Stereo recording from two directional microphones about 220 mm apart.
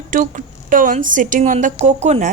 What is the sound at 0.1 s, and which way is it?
A woman's voice, 35° right (ahead or behind).